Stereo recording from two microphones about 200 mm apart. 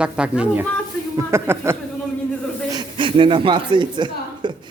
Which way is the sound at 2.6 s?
20° right (ahead or behind).